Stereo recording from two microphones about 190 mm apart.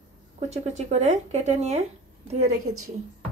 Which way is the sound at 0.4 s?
35° right (ahead or behind).